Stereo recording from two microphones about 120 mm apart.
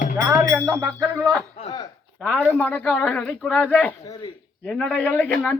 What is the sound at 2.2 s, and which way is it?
Speech, 15° left (ahead or behind).